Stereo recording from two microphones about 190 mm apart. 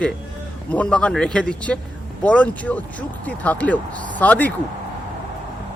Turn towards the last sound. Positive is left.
turn(degrees=10)  # may be behind; listen again after turning